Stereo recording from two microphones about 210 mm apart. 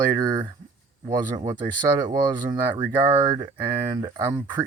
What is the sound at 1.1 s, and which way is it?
Speech, 20° right (ahead or behind).